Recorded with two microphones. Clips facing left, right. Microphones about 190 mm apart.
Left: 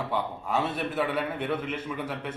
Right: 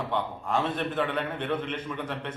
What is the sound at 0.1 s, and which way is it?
A man's voice, 5° left (ahead or behind).